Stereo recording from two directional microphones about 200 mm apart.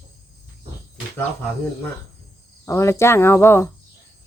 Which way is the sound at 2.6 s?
15° left (ahead or behind).